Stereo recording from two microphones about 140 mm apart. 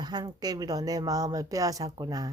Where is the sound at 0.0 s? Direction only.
30° right (ahead or behind).